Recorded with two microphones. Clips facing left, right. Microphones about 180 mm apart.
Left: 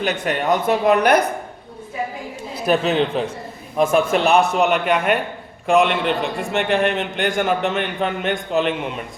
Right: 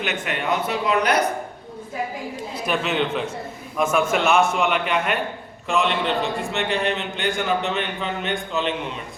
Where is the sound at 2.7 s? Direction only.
35° left (ahead or behind).